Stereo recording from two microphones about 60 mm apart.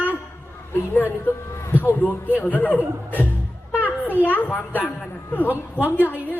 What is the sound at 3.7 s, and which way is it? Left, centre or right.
Children playing, left.